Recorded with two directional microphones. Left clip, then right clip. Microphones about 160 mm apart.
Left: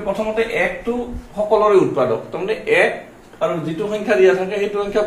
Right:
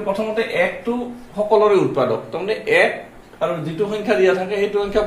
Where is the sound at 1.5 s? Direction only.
15° right (ahead or behind).